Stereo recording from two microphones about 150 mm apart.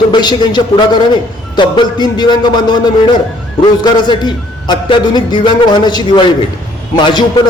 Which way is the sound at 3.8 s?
30° left (ahead or behind).